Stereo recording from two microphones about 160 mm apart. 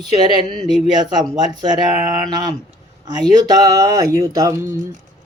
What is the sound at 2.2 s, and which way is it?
Speech, 25° right (ahead or behind).